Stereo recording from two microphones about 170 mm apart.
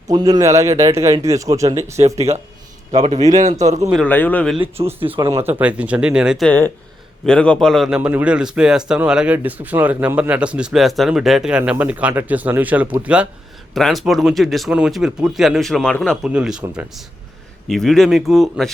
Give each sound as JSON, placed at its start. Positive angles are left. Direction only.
{"t": 0.1, "sound": "speech", "side_deg": -20}
{"t": 2.0, "sound": "a man's voice", "side_deg": -40}
{"t": 3.9, "sound": "a man's voice", "side_deg": 10}
{"t": 4.8, "sound": "speech", "side_deg": -25}
{"t": 5.4, "sound": "a man's voice", "side_deg": -10}